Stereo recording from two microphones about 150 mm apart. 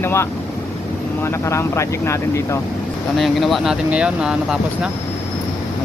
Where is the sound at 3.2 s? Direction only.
Centre (ahead or behind).